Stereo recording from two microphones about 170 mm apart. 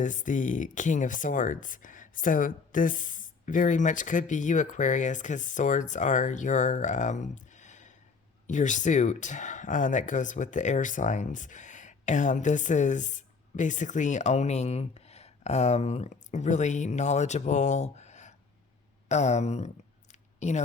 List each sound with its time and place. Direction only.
0.0 s speech: 50° left (ahead or behind)